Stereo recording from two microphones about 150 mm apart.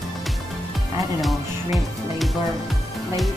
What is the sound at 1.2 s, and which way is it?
Speech, centre (ahead or behind).